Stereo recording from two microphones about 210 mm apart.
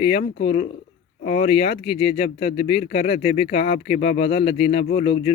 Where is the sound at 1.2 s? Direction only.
30° left (ahead or behind).